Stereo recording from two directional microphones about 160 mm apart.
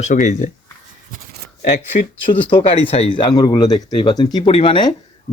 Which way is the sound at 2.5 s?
35° left (ahead or behind).